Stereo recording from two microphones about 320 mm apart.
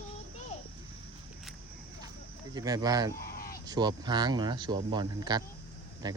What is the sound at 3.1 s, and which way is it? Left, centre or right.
Fowl, left.